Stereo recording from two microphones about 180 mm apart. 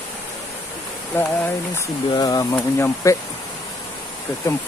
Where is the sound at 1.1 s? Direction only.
10° left (ahead or behind).